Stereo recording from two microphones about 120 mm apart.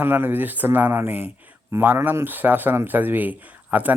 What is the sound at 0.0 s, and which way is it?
A man's voice, 15° right (ahead or behind).